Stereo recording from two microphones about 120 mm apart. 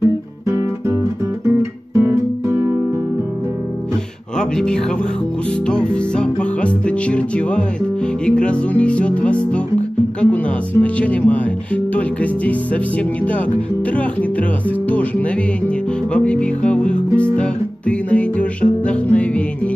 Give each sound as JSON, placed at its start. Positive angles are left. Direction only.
{"t": 1.6, "sound": "guitar", "side_deg": -20}
{"t": 4.4, "sound": "speech", "side_deg": 5}
{"t": 5.7, "sound": "music", "side_deg": 5}
{"t": 14.9, "sound": "music", "side_deg": 10}